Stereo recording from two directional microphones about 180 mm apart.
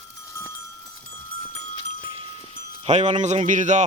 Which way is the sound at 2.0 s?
30° right (ahead or behind).